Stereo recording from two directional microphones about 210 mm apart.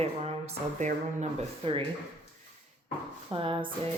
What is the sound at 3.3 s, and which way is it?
Speech, 25° right (ahead or behind).